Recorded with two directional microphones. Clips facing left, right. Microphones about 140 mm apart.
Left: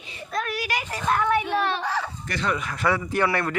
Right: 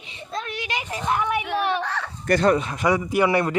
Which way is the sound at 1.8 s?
Centre (ahead or behind).